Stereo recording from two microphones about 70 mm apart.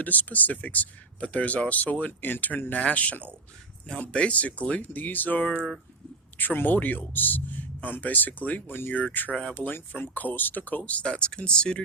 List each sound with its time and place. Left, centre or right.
0.0 s speech: left